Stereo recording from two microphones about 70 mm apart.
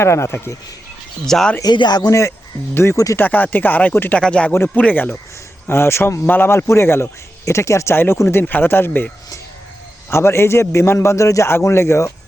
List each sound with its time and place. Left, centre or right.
0.0 s a man's voice: left
1.2 s speech: centre
1.6 s speech: left
2.0 s speech: left
3.2 s speech: left
4.2 s speech: centre
5.6 s a man's voice: left
7.9 s a man's voice: left
10.1 s a man's voice: left